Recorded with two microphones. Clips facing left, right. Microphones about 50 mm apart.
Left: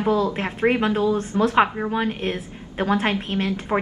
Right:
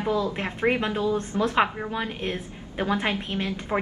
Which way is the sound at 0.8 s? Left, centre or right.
Left.